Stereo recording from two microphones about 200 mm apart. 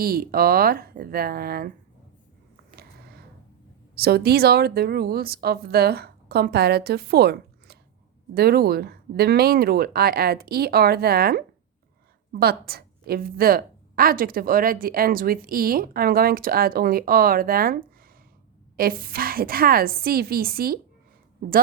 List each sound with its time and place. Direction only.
0.0 s a woman's voice: 50° right (ahead or behind)
3.9 s a woman's voice: 50° right (ahead or behind)